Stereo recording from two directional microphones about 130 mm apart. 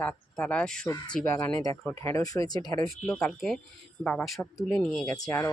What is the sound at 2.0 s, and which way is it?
Speech, 25° left (ahead or behind).